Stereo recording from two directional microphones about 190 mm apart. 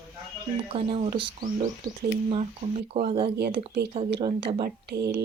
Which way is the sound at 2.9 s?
30° right (ahead or behind).